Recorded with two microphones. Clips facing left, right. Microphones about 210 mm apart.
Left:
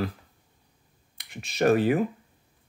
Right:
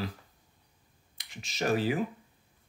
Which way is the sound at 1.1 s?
60° left (ahead or behind).